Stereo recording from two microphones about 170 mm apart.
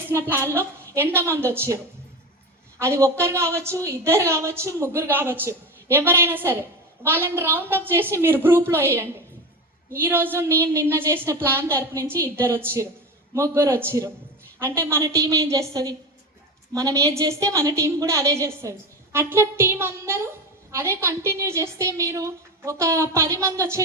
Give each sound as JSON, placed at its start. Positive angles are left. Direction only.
{"t": 0.1, "sound": "a woman's voice", "side_deg": -15}